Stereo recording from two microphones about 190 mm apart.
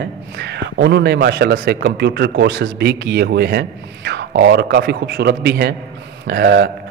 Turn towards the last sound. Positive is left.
turn(degrees=-60)  # may be behind; listen again after turning